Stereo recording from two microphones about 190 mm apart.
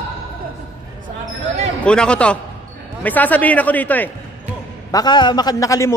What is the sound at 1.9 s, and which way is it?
A man's voice, 5° left (ahead or behind).